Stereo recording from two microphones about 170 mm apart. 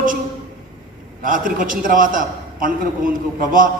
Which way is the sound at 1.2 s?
55° right (ahead or behind).